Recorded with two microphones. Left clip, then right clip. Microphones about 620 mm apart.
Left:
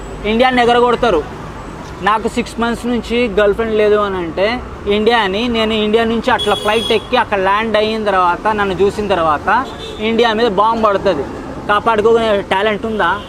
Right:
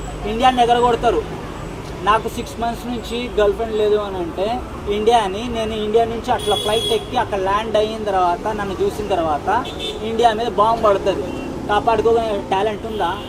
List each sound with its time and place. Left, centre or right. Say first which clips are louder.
0.3 s speech: left 3 dB; left